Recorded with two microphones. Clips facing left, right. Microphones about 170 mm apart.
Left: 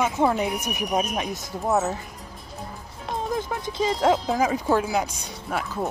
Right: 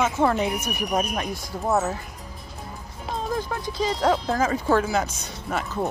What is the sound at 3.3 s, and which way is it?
Speech, 20° left (ahead or behind).